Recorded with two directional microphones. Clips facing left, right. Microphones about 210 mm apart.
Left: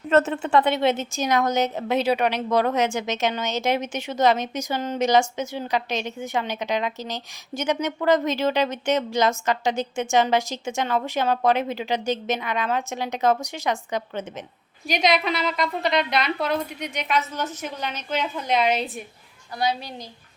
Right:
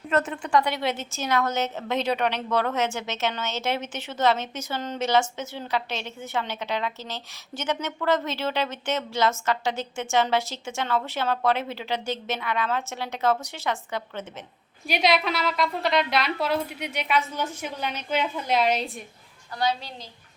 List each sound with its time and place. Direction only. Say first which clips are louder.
0.2 s a woman's voice: left 3 dB; 25° left (ahead or behind)
14.8 s a woman's voice: left 1 dB; 5° right (ahead or behind)
19.5 s a woman's voice: left 1 dB; 10° left (ahead or behind)